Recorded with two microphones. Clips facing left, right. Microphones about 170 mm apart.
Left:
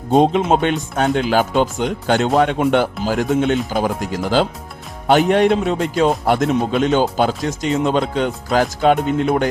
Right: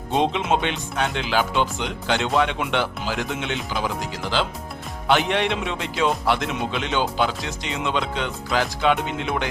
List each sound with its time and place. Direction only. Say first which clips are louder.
0.1 s speech: left 7 dB; 45° left (ahead or behind)